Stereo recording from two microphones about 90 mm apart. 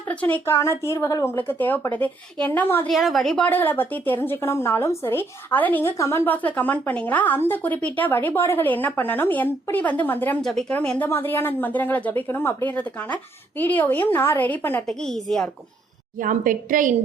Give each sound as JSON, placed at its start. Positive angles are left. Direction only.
{"t": 0.1, "sound": "speech", "side_deg": 15}
{"t": 0.4, "sound": "a woman's voice", "side_deg": 30}
{"t": 2.8, "sound": "a woman's voice", "side_deg": 0}
{"t": 3.4, "sound": "a woman's voice", "side_deg": 20}
{"t": 6.0, "sound": "speech", "side_deg": 30}
{"t": 6.2, "sound": "a woman's voice", "side_deg": 20}
{"t": 8.6, "sound": "a woman's voice", "side_deg": 20}
{"t": 10.4, "sound": "a woman's voice", "side_deg": 5}
{"t": 10.8, "sound": "speech", "side_deg": 15}
{"t": 11.1, "sound": "a woman's voice", "side_deg": 25}
{"t": 14.8, "sound": "a woman's voice", "side_deg": 5}